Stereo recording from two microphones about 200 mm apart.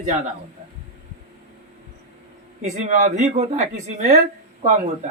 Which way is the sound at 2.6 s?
35° right (ahead or behind).